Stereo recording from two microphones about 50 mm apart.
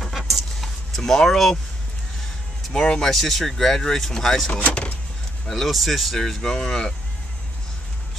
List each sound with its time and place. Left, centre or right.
0.0 s a sound: centre
2.7 s speech: centre
3.1 s speech: centre
4.5 s speech: left
5.5 s speech: centre